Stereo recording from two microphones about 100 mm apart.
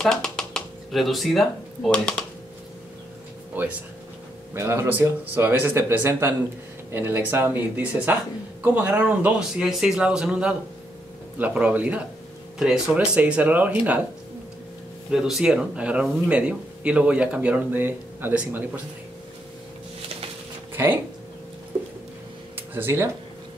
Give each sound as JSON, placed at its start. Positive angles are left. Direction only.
{"t": 0.0, "sound": "speech", "side_deg": 5}
{"t": 3.5, "sound": "speech", "side_deg": -15}
{"t": 9.6, "sound": "speech", "side_deg": -5}
{"t": 15.0, "sound": "speech", "side_deg": -5}
{"t": 20.7, "sound": "speech", "side_deg": -20}
{"t": 22.6, "sound": "a sound", "side_deg": -20}